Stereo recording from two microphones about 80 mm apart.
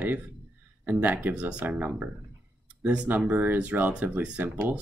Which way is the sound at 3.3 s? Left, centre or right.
Right.